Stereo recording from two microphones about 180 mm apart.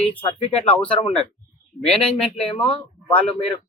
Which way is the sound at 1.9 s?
5° left (ahead or behind).